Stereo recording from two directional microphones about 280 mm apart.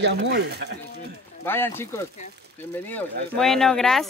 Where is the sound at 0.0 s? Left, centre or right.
Right.